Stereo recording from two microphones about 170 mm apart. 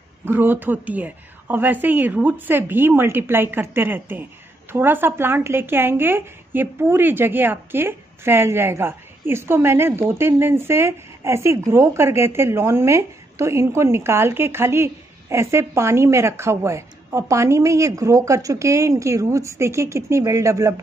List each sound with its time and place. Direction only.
0.2 s a woman's voice: 10° right (ahead or behind)